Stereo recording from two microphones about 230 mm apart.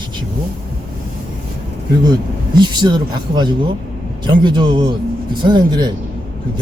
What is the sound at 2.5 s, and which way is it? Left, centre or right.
A man's voice, centre.